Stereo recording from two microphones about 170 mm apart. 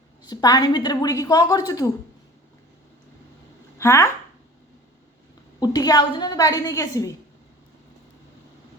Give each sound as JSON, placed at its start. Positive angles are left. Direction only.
{"t": 0.2, "sound": "a woman's voice", "side_deg": 25}
{"t": 3.8, "sound": "speech", "side_deg": 15}
{"t": 5.5, "sound": "a woman's voice", "side_deg": 25}